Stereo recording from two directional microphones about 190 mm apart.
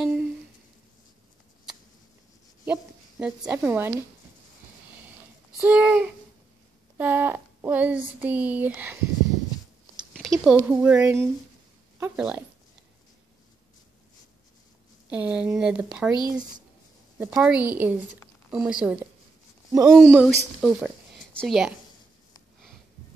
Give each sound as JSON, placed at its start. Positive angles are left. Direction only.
{"t": 0.0, "sound": "a sound", "side_deg": -5}
{"t": 2.6, "sound": "a sound", "side_deg": -5}
{"t": 5.6, "sound": "speech", "side_deg": -5}
{"t": 10.1, "sound": "a sound", "side_deg": 0}
{"t": 10.5, "sound": "speech", "side_deg": -10}
{"t": 15.0, "sound": "speech", "side_deg": -5}
{"t": 16.3, "sound": "speech", "side_deg": -20}
{"t": 17.2, "sound": "speech", "side_deg": -5}
{"t": 19.7, "sound": "speech", "side_deg": -15}
{"t": 20.0, "sound": "a woman's voice", "side_deg": -5}